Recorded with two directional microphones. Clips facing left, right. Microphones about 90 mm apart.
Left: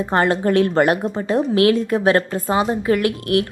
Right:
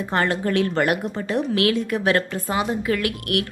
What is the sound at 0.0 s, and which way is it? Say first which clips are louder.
A woman's voice: left 5 dB; 30° left (ahead or behind).